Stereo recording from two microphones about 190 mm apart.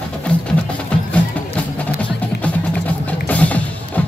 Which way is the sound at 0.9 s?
5° left (ahead or behind).